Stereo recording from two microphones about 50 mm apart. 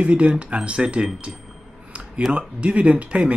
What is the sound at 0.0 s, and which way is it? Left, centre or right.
Speech, right.